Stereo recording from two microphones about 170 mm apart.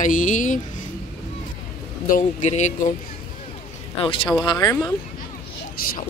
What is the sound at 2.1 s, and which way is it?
Speech, 45° left (ahead or behind).